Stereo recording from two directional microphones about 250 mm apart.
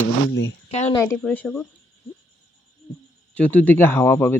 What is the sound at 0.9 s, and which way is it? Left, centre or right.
Speech, centre.